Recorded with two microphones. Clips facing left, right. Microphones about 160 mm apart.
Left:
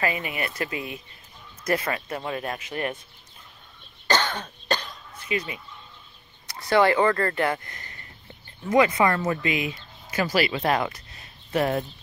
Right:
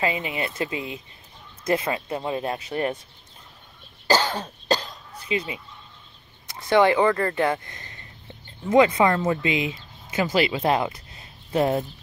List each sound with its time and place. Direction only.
0.0 s speech: 20° right (ahead or behind)
4.1 s cough: 35° right (ahead or behind)
5.3 s speech: 25° right (ahead or behind)